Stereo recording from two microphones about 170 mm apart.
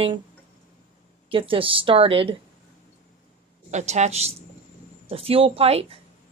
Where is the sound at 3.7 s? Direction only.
40° right (ahead or behind).